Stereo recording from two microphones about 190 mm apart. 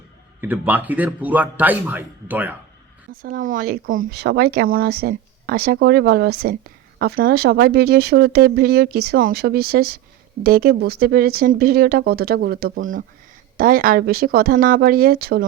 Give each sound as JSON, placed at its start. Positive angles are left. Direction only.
{"t": 0.4, "sound": "speech", "side_deg": -10}
{"t": 3.2, "sound": "speech", "side_deg": -45}